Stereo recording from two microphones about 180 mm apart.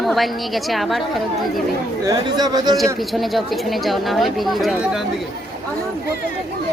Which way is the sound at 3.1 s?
Centre (ahead or behind).